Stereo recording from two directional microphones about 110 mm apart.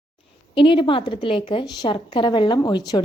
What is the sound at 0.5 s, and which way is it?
Speech, 50° left (ahead or behind).